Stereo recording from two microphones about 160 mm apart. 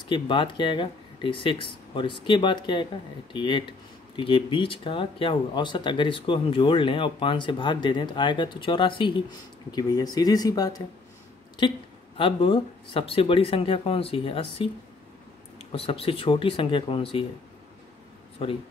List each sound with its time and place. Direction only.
0.1 s speech: 30° left (ahead or behind)
15.7 s speech: 35° left (ahead or behind)